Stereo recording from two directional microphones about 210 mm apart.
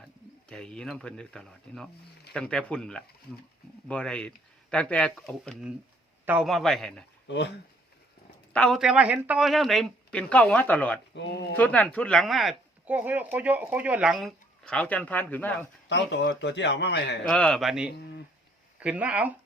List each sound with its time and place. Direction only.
0.4 s speech: 5° left (ahead or behind)
7.3 s speech: 55° left (ahead or behind)
8.5 s speech: centre (ahead or behind)
11.1 s speech: 55° left (ahead or behind)
11.5 s speech: 5° left (ahead or behind)
15.9 s a man's voice: 55° left (ahead or behind)
17.2 s speech: 5° left (ahead or behind)
17.9 s speech: 50° left (ahead or behind)
18.8 s speech: 5° right (ahead or behind)